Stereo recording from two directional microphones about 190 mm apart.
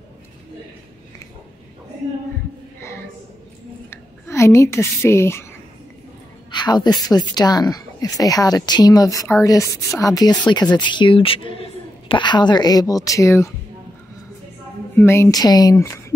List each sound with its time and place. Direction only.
2.8 s a sound: 15° left (ahead or behind)
3.9 s a woman's voice: 15° left (ahead or behind)
6.5 s a woman's voice: 20° left (ahead or behind)
15.0 s speech: 15° left (ahead or behind)